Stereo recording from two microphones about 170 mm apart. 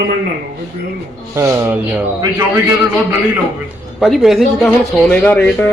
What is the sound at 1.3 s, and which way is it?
A man's voice, 15° right (ahead or behind).